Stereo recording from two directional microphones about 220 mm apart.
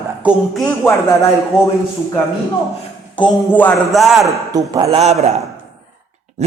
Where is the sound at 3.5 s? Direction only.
5° left (ahead or behind).